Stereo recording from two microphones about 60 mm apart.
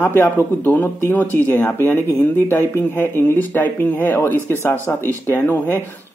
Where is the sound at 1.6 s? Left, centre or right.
Left.